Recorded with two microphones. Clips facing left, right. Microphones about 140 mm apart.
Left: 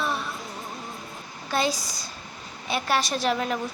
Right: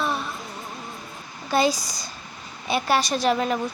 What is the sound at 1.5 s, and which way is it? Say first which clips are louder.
A child's voice: right 4 dB; centre (ahead or behind).